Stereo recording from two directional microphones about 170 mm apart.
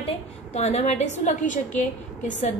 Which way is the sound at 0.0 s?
40° left (ahead or behind).